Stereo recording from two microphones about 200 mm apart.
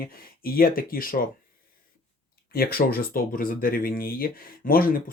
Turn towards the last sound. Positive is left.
turn(degrees=45)  # may be behind; listen again after turning